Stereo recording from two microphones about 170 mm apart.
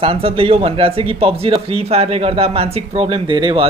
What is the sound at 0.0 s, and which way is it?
Speech, 35° right (ahead or behind).